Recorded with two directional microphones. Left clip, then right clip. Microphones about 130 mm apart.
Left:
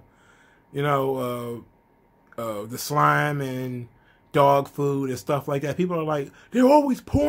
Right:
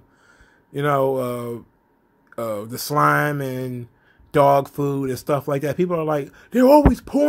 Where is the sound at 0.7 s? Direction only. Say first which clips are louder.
Right 4 dB; 45° right (ahead or behind).